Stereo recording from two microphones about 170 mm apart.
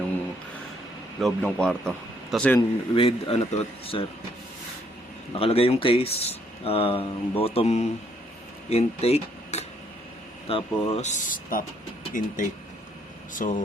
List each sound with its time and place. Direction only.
1.2 s a man's voice: 5° left (ahead or behind)
2.6 s speech: 30° left (ahead or behind)
5.4 s speech: 35° left (ahead or behind)
13.4 s speech: 50° left (ahead or behind)